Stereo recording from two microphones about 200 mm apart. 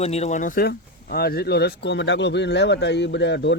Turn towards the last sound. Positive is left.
turn(degrees=60)  # may be behind; listen again after turning